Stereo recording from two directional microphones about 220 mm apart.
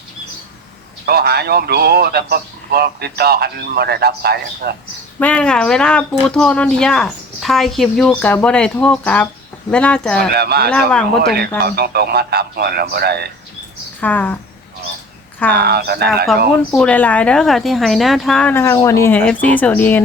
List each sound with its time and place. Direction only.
1.0 s a man's voice: 45° right (ahead or behind)
5.2 s speech: 5° left (ahead or behind)
10.3 s a man's voice: 45° right (ahead or behind)
10.7 s speech: 5° left (ahead or behind)
11.2 s a man's voice: 45° right (ahead or behind)
14.0 s speech: 5° left (ahead or behind)
15.5 s a man's voice: 45° right (ahead or behind)
16.7 s speech: 5° left (ahead or behind)